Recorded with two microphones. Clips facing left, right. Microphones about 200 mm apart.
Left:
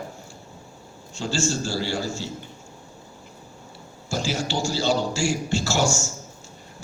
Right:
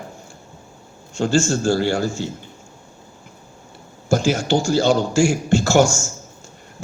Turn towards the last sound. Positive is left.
turn(degrees=-50)  # may be behind; listen again after turning